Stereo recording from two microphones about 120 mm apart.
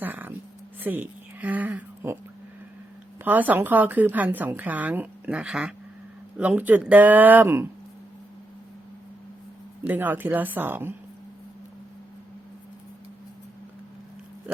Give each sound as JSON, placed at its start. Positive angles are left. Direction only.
{"t": 0.0, "sound": "a sound", "side_deg": -15}
{"t": 3.2, "sound": "a woman's voice", "side_deg": -15}
{"t": 9.8, "sound": "a woman's voice", "side_deg": -15}